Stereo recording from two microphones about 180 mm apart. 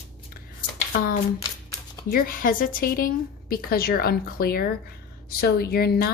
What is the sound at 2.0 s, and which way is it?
A woman's voice, 50° left (ahead or behind).